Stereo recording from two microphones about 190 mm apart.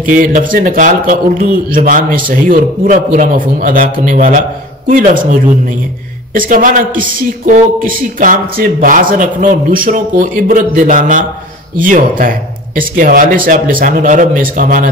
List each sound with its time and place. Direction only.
0.0 s speech: 45° right (ahead or behind)
6.3 s speech: 45° right (ahead or behind)